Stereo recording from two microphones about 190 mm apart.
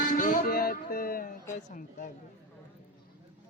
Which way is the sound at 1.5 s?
45° left (ahead or behind).